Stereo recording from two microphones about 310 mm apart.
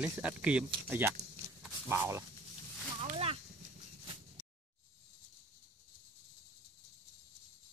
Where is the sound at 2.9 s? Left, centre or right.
Centre.